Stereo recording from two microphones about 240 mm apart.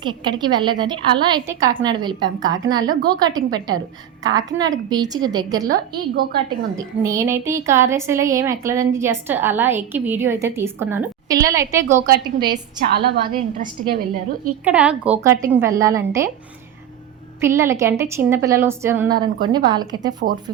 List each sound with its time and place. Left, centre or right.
0.3 s a woman's voice: centre
6.7 s a woman's voice: centre
12.0 s a woman's voice: right
14.6 s a woman's voice: centre
17.4 s a woman's voice: centre